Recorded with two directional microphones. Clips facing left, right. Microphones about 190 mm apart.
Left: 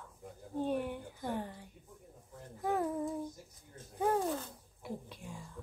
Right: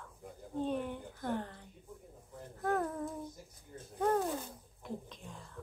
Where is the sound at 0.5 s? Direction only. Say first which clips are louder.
Left 1 dB; 10° left (ahead or behind).